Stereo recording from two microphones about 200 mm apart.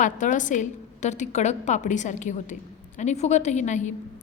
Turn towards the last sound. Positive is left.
turn(degrees=35)  # may be behind; listen again after turning